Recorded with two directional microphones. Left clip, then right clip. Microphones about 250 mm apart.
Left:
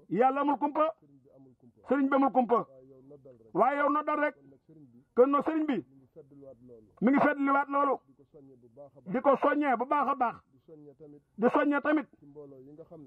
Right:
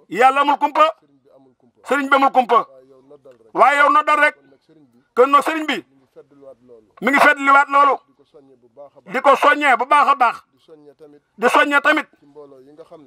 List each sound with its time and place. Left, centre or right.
0.1 s speech: centre
2.7 s a sound: right
3.3 s a sound: centre
7.0 s a man's voice: centre
12.4 s speech: right
12.7 s speech: centre